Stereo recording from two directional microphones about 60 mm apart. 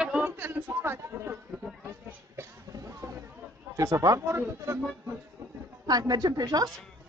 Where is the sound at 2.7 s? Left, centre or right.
Right.